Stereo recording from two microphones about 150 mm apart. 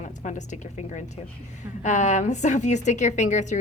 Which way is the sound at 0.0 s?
55° left (ahead or behind).